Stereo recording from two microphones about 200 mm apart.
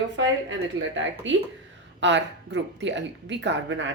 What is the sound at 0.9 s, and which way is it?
A woman's voice, 70° right (ahead or behind).